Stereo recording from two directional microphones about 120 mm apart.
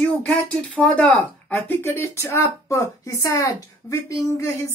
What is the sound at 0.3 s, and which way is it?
Speech, 10° left (ahead or behind).